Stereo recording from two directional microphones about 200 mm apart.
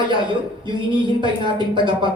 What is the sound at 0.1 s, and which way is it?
Speech, 25° right (ahead or behind).